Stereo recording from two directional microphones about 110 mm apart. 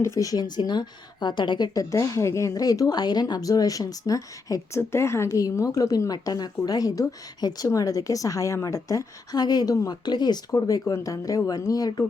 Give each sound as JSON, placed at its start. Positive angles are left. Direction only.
{"t": 0.0, "sound": "a woman's voice", "side_deg": 30}